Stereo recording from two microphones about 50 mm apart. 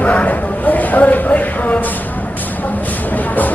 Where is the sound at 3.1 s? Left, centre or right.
Left.